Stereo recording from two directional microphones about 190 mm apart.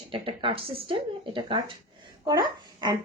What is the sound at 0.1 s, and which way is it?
A child's voice, 25° right (ahead or behind).